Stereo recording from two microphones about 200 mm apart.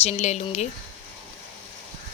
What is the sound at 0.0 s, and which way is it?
Speech, 35° left (ahead or behind).